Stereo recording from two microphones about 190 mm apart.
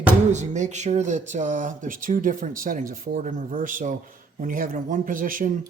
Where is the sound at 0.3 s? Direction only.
40° right (ahead or behind).